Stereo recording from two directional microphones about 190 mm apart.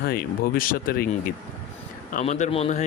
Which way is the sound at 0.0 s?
50° left (ahead or behind).